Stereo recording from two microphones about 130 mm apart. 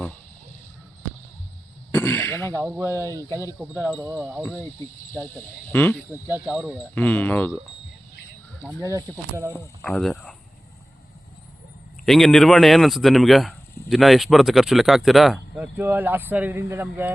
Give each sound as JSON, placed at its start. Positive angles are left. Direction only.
{"t": 1.9, "sound": "throat clearing", "side_deg": 15}
{"t": 2.5, "sound": "speech", "side_deg": -20}
{"t": 2.9, "sound": "speech", "side_deg": 20}
{"t": 3.8, "sound": "speech", "side_deg": -10}
{"t": 5.1, "sound": "speech", "side_deg": 15}
{"t": 6.4, "sound": "speech", "side_deg": -5}
{"t": 6.9, "sound": "speech", "side_deg": 10}
{"t": 8.8, "sound": "speech", "side_deg": -25}
{"t": 9.5, "sound": "speech", "side_deg": 20}
{"t": 9.9, "sound": "speech", "side_deg": 0}
{"t": 12.0, "sound": "speech", "side_deg": 0}
{"t": 15.5, "sound": "speech", "side_deg": -15}